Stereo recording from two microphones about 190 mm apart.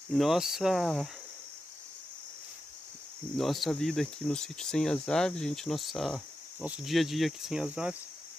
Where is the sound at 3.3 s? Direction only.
Centre (ahead or behind).